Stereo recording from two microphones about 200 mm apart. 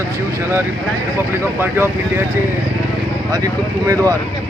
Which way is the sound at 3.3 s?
15° right (ahead or behind).